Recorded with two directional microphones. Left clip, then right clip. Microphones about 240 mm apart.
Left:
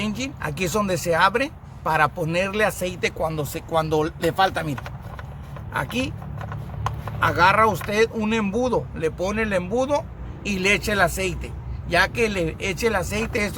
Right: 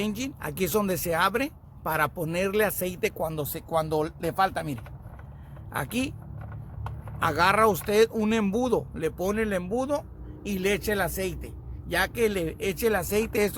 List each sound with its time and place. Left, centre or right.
0.0 s speech: right
5.7 s speech: right
7.2 s speech: right